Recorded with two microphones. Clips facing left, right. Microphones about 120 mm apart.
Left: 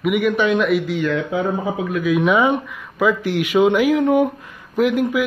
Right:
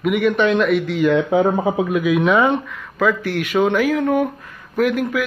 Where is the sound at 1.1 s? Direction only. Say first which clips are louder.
Right 5 dB; 30° right (ahead or behind).